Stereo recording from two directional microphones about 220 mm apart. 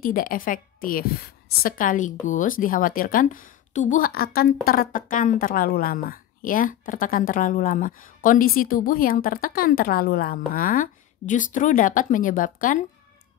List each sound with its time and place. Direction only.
0.0 s a woman's voice: 40° left (ahead or behind)